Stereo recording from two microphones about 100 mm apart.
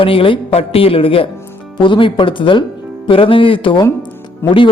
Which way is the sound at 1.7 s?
55° left (ahead or behind).